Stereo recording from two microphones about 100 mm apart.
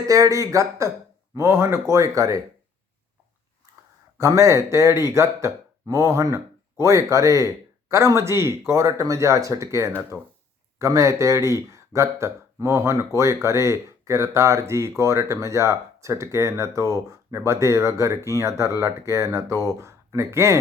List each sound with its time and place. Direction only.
0.0 s speech: 35° right (ahead or behind)
4.2 s speech: 30° right (ahead or behind)
10.1 s speech: 5° right (ahead or behind)
10.8 s speech: 30° right (ahead or behind)